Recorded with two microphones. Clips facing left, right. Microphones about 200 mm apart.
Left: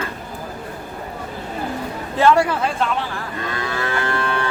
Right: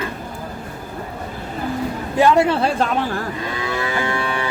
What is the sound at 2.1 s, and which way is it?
A woman's voice, 20° right (ahead or behind).